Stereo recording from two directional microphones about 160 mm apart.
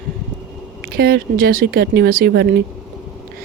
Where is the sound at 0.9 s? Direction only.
75° right (ahead or behind); by 2.6 s 90° right.